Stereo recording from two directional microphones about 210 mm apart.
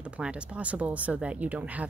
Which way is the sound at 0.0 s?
5° right (ahead or behind).